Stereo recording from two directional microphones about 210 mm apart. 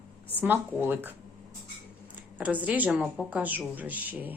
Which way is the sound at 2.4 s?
5° right (ahead or behind).